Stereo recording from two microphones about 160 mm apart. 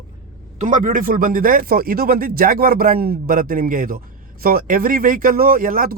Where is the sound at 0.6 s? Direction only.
55° right (ahead or behind).